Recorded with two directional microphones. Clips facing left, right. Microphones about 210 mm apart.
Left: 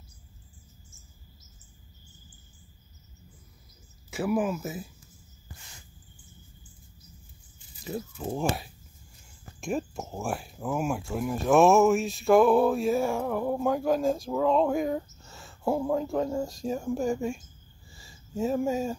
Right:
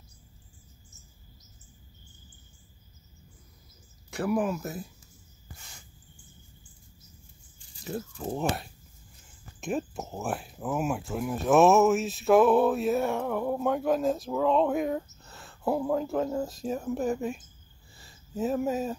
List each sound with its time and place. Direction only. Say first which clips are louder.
4.1 s speech: even; centre (ahead or behind)
7.5 s a sound: even; centre (ahead or behind)
9.6 s speech: even; centre (ahead or behind)